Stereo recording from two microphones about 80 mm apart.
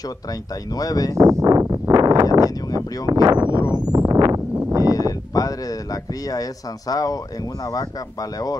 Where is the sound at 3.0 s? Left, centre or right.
Right.